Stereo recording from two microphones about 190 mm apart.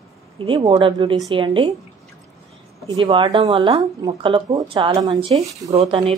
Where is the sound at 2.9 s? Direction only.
25° right (ahead or behind).